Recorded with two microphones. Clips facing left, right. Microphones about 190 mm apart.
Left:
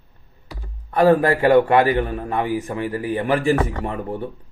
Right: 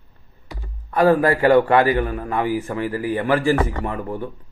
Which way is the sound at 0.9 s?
30° left (ahead or behind).